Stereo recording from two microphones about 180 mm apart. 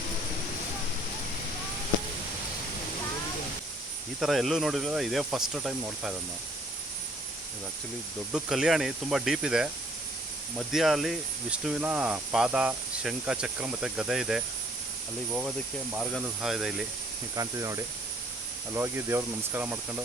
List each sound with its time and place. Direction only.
4.2 s speech: centre (ahead or behind)
8.3 s speech: 5° right (ahead or behind)
17.3 s speech: 20° right (ahead or behind)